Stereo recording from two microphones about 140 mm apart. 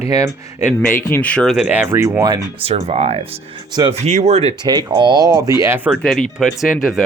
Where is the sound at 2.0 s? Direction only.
25° right (ahead or behind).